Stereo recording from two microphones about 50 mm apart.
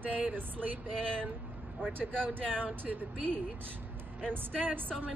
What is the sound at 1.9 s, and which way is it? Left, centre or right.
A woman's voice, right.